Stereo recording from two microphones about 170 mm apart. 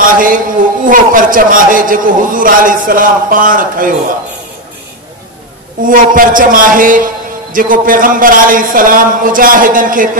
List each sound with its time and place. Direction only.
0.0 s a man's voice: 55° right (ahead or behind)
5.8 s a man's voice: 55° right (ahead or behind)